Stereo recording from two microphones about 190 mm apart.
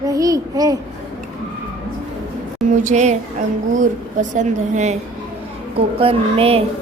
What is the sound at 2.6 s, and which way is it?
A woman's voice, 40° right (ahead or behind).